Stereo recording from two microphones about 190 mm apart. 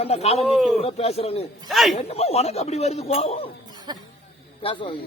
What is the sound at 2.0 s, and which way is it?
Speech, 35° left (ahead or behind).